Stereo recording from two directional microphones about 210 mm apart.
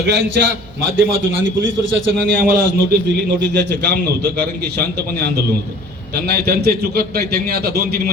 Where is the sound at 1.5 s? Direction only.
65° right (ahead or behind).